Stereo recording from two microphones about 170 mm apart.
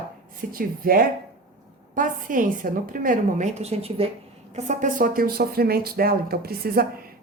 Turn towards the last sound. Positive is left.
turn(degrees=-65)  # may be behind; listen again after turning